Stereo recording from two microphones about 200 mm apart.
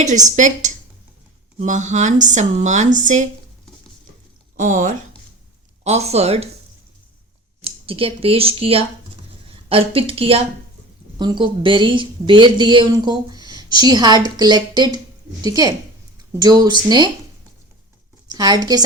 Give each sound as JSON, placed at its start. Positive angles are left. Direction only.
{"t": 0.0, "sound": "speech", "side_deg": -40}
{"t": 4.5, "sound": "speech", "side_deg": -40}
{"t": 7.6, "sound": "a woman's voice", "side_deg": -30}
{"t": 18.3, "sound": "speech", "side_deg": -20}